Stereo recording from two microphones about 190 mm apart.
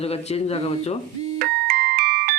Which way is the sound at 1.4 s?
55° right (ahead or behind).